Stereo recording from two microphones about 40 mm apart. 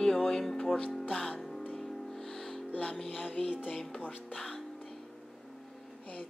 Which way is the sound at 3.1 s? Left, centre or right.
Left.